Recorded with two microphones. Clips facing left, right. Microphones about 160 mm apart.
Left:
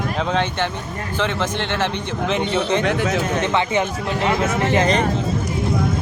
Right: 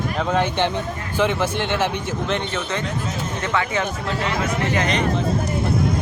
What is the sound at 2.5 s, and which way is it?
Speech, 20° left (ahead or behind).